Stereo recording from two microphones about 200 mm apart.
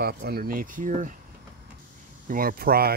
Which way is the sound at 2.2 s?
45° right (ahead or behind).